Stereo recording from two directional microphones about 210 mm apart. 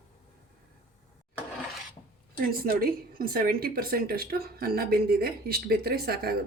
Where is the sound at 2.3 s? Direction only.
45° right (ahead or behind).